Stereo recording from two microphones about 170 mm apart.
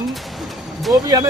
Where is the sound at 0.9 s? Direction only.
20° right (ahead or behind).